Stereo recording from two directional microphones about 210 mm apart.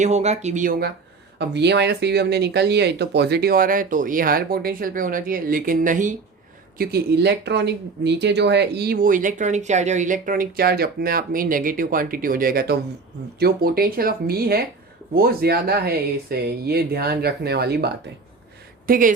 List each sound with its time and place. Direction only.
0.0 s speech: 30° right (ahead or behind)
1.4 s speech: 55° right (ahead or behind); by 6.1 s 40° right (ahead or behind)
6.7 s speech: 50° right (ahead or behind)